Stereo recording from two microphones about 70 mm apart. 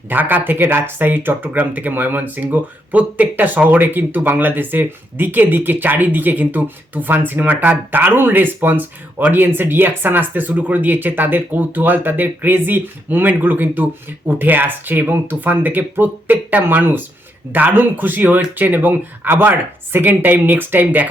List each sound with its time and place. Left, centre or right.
0.1 s speech: right